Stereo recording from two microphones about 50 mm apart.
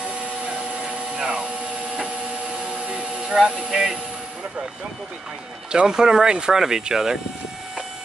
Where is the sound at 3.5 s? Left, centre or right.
Centre.